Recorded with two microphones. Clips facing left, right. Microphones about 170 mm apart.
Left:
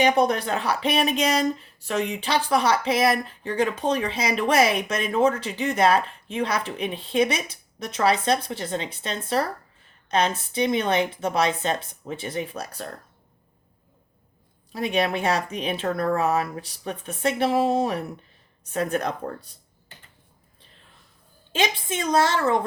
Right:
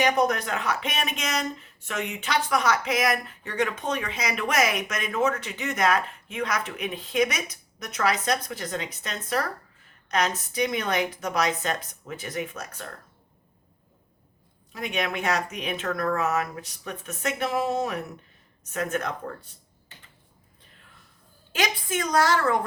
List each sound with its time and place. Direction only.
0.0 s a woman's voice: 30° left (ahead or behind)
14.7 s speech: 35° left (ahead or behind)
21.5 s a woman's voice: 25° left (ahead or behind)